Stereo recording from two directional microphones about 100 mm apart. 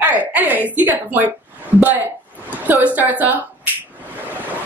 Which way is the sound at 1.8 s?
20° right (ahead or behind).